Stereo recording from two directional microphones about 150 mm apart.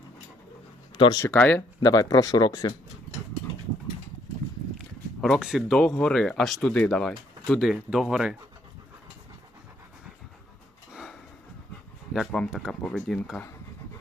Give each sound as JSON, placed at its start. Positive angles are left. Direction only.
{"t": 0.9, "sound": "speech", "side_deg": 30}
{"t": 1.2, "sound": "speech", "side_deg": 10}
{"t": 1.8, "sound": "speech", "side_deg": 25}
{"t": 5.2, "sound": "speech", "side_deg": 0}
{"t": 10.9, "sound": "a sound", "side_deg": 0}
{"t": 12.1, "sound": "speech", "side_deg": 5}